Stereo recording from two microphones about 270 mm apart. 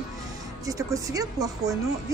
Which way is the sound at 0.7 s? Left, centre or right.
Centre.